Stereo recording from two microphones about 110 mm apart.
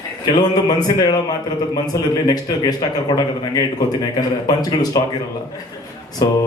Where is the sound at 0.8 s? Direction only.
40° left (ahead or behind).